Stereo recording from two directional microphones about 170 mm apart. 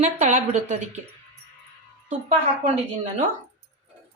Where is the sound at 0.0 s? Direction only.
45° right (ahead or behind).